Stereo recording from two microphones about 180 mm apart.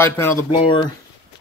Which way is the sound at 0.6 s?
25° left (ahead or behind).